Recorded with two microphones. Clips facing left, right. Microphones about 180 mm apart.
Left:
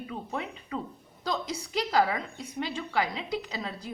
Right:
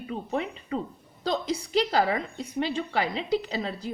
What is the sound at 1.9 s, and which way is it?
A woman's voice, 40° right (ahead or behind).